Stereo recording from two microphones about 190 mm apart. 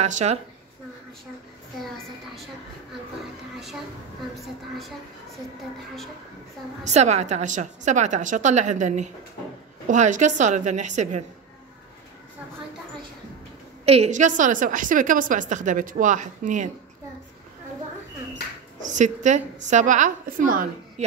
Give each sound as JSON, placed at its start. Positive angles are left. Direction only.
{"t": 0.0, "sound": "a woman's voice", "side_deg": -35}
{"t": 6.8, "sound": "a woman's voice", "side_deg": -35}
{"t": 13.8, "sound": "a woman's voice", "side_deg": -35}
{"t": 18.3, "sound": "speech", "side_deg": -40}